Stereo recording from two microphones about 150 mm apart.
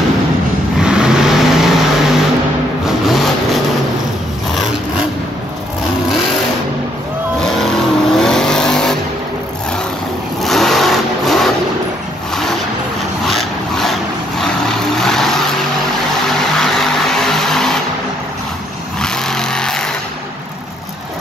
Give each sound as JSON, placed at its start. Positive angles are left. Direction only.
{"t": 0.7, "sound": "vehicle", "side_deg": -5}
{"t": 7.3, "sound": "vehicle", "side_deg": 5}
{"t": 10.4, "sound": "vehicle", "side_deg": 0}
{"t": 13.3, "sound": "a sound", "side_deg": 0}
{"t": 14.4, "sound": "vehicle", "side_deg": 5}
{"t": 16.5, "sound": "vehicle", "side_deg": 5}
{"t": 18.9, "sound": "a sound", "side_deg": 5}